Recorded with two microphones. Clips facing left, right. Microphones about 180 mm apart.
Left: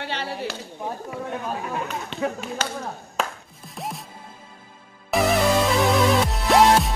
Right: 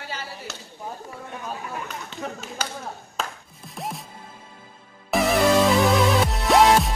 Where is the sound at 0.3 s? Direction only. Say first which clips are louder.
Left 8 dB; 70° left (ahead or behind).